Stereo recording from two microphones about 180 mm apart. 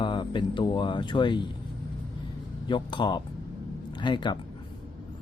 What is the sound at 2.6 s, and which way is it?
Speech, 25° left (ahead or behind).